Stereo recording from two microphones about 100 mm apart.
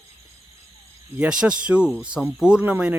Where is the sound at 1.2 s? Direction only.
10° right (ahead or behind).